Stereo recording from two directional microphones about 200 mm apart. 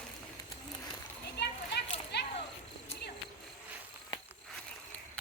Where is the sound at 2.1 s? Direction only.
55° left (ahead or behind).